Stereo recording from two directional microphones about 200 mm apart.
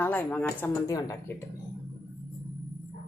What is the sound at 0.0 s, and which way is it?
Speech, 10° left (ahead or behind).